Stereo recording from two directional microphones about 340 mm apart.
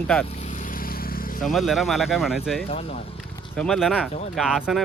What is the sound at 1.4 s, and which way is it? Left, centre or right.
Speech, centre.